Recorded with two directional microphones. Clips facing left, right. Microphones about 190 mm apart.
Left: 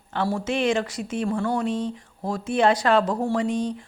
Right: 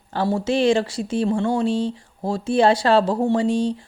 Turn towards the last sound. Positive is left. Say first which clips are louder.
# right 4 dB
turn(degrees=-30)  # may be behind; listen again after turning